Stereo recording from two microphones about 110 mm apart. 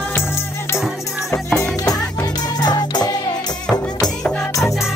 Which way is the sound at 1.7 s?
35° left (ahead or behind).